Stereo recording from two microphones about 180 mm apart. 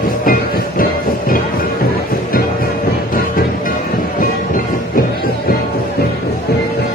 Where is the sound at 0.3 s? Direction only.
50° left (ahead or behind).